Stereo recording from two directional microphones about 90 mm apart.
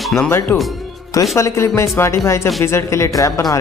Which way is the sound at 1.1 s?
35° left (ahead or behind).